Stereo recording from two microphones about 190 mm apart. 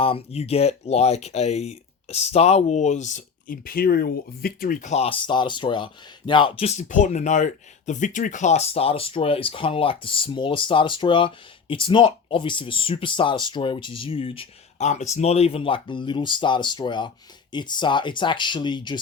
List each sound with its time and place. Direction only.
0.0 s speech: 30° left (ahead or behind)